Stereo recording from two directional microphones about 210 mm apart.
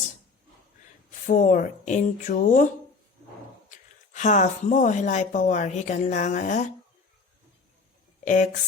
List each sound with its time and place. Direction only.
1.3 s speech: 40° left (ahead or behind)
3.7 s speech: 35° left (ahead or behind)
8.2 s speech: 35° left (ahead or behind)